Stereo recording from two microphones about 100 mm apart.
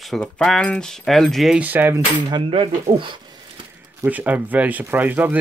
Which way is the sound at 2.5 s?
60° right (ahead or behind).